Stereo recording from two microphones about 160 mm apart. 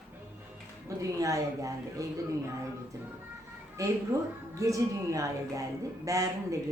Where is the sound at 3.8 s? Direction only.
20° right (ahead or behind).